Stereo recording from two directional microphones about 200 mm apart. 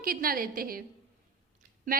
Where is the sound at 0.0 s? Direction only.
45° right (ahead or behind).